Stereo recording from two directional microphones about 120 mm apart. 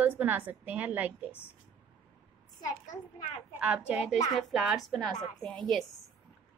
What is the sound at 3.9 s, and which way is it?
A woman's voice, 10° right (ahead or behind).